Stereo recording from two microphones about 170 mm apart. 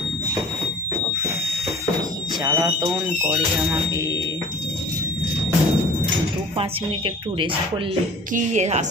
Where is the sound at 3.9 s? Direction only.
20° right (ahead or behind).